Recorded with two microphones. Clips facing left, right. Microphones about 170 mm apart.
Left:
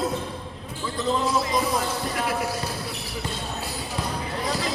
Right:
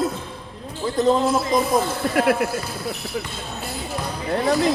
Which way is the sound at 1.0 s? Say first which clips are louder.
Right 6 dB; 50° right (ahead or behind).